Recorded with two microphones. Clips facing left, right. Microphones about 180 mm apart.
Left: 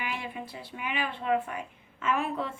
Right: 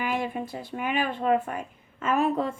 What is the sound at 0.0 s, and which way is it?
Speech, 45° right (ahead or behind).